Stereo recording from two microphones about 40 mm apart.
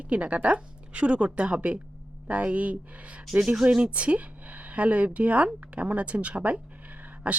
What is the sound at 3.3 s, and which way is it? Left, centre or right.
Speech, centre.